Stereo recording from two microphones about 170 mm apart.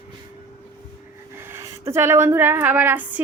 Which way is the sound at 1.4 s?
15° right (ahead or behind).